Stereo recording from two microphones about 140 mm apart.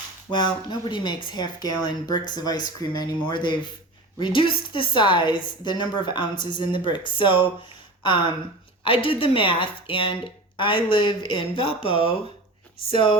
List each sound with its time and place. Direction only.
0.3 s a woman's voice: 35° left (ahead or behind)